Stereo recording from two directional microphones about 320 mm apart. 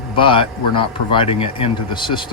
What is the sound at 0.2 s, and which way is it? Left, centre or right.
Speech, centre.